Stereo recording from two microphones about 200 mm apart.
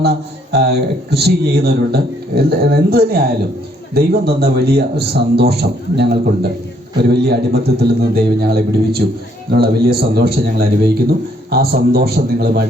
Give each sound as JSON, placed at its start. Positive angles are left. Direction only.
{"t": 0.0, "sound": "a man's voice", "side_deg": -55}